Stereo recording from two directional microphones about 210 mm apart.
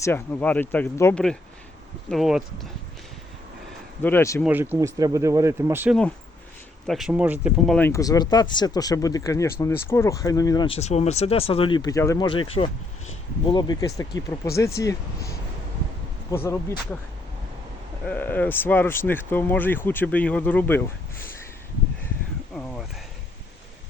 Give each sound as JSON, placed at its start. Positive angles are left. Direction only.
{"t": 0.0, "sound": "speech", "side_deg": 10}
{"t": 2.0, "sound": "speech", "side_deg": 0}
{"t": 4.0, "sound": "speech", "side_deg": 10}
{"t": 4.4, "sound": "speech", "side_deg": -10}
{"t": 7.8, "sound": "speech", "side_deg": 15}
{"t": 10.8, "sound": "speech", "side_deg": 30}
{"t": 18.0, "sound": "speech", "side_deg": 10}